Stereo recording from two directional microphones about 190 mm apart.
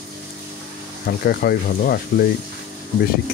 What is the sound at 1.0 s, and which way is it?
Speech, 55° left (ahead or behind).